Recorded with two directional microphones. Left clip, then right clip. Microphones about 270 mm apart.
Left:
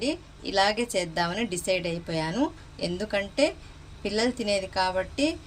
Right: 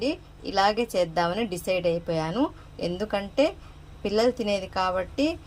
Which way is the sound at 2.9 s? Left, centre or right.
Right.